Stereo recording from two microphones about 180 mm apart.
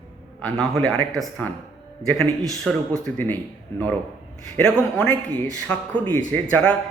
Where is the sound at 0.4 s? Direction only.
Centre (ahead or behind).